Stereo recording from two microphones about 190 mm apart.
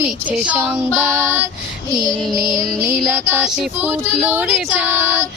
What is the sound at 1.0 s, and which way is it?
Music, 15° right (ahead or behind).